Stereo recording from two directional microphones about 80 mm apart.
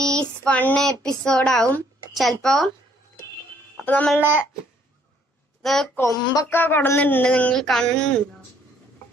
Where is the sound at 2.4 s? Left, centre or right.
Centre.